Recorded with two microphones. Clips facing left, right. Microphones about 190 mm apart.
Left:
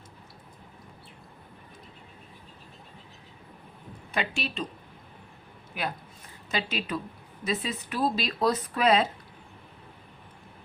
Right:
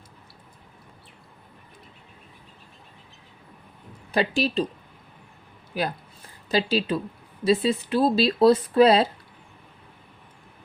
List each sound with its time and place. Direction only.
4.1 s speech: 35° right (ahead or behind)
5.7 s speech: 35° right (ahead or behind)